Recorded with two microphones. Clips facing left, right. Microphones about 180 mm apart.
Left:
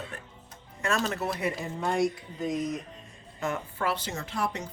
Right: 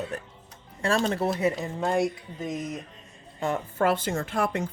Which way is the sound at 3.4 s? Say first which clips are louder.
Right 5 dB; 35° right (ahead or behind).